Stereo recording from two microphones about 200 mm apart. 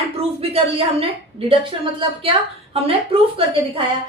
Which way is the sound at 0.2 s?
30° right (ahead or behind).